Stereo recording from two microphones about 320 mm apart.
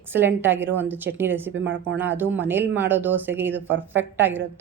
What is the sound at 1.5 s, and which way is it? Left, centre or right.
Speech, right.